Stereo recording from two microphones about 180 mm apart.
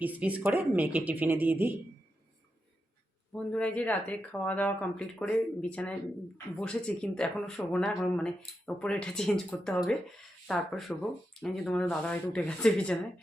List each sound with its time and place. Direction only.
0.0 s speech: 10° right (ahead or behind)
3.3 s speech: 5° left (ahead or behind)